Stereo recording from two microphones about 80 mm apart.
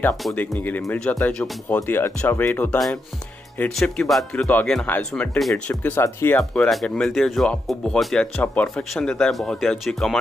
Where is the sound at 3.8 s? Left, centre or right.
Centre.